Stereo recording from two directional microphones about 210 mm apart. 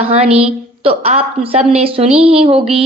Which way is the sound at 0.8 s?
30° right (ahead or behind).